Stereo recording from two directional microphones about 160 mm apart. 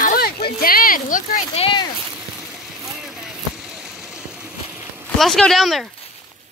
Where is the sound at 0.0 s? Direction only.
70° left (ahead or behind).